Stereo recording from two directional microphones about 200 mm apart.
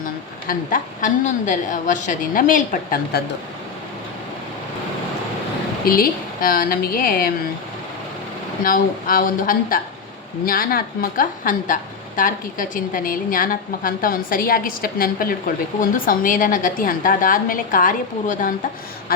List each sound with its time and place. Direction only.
0.0 s a woman's voice: 40° left (ahead or behind)
5.8 s a woman's voice: 45° left (ahead or behind)
8.6 s a woman's voice: 45° left (ahead or behind)